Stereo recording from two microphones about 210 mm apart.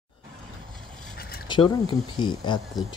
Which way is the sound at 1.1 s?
45° left (ahead or behind).